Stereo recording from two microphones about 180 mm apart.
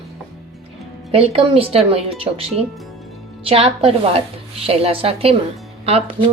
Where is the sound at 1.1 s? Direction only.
35° right (ahead or behind).